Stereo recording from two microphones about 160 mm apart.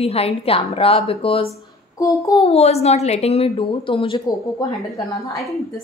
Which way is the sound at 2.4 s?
40° left (ahead or behind).